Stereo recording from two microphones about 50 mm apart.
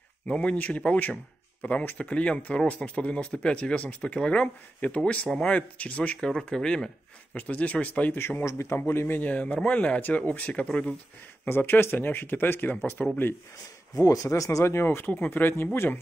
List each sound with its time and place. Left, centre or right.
0.3 s speech: left
6.2 s speech: centre
7.3 s speech: left
8.2 s speech: left
8.5 s a man's voice: left
8.7 s speech: left
9.3 s speech: left
11.4 s speech: left
14.3 s speech: left
15.0 s speech: left